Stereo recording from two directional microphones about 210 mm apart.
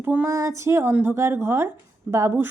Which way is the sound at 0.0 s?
10° right (ahead or behind).